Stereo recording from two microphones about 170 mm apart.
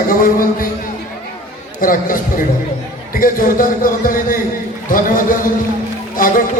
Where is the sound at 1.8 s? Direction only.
55° left (ahead or behind).